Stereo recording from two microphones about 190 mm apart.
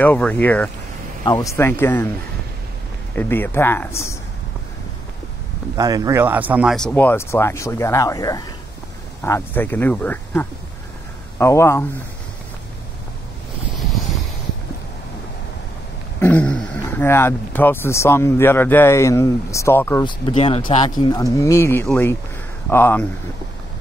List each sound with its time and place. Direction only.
0.0 s speech: 10° left (ahead or behind)
3.2 s speech: 10° left (ahead or behind)
5.8 s speech: 20° right (ahead or behind); by 11.8 s 15° left (ahead or behind)
16.2 s speech: 10° left (ahead or behind)
20.1 s speech: 25° left (ahead or behind); by 23.0 s 10° left (ahead or behind)